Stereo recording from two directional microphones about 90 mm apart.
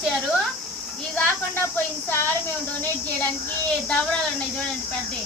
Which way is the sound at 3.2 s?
10° left (ahead or behind).